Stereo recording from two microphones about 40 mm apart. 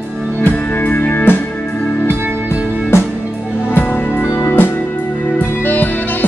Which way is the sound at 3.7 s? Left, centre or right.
Left.